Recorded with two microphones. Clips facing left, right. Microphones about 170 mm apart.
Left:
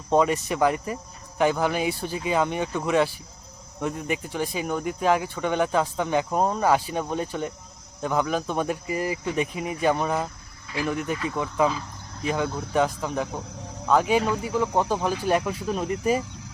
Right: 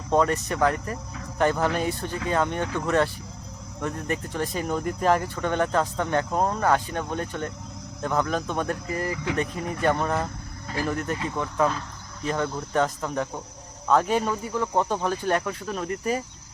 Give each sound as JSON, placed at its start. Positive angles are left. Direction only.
{"t": 0.1, "sound": "speech", "side_deg": 10}
{"t": 9.1, "sound": "speech", "side_deg": -90}
{"t": 9.4, "sound": "speech", "side_deg": 10}